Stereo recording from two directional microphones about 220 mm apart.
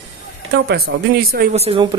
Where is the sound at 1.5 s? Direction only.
25° right (ahead or behind).